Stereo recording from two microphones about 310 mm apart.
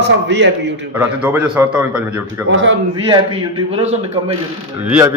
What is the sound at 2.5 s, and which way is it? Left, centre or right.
Speech, right.